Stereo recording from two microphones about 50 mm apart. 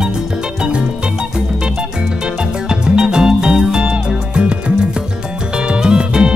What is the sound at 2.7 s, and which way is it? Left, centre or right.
Music, centre.